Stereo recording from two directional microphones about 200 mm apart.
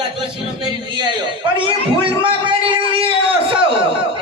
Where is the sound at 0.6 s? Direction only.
25° right (ahead or behind).